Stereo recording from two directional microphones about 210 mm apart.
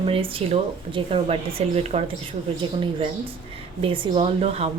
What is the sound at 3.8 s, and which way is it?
Speech, 25° right (ahead or behind).